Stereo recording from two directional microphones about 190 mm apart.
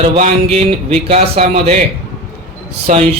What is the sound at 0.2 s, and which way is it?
Speech, 35° right (ahead or behind).